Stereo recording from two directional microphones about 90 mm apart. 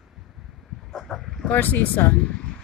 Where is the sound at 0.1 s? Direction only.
5° right (ahead or behind).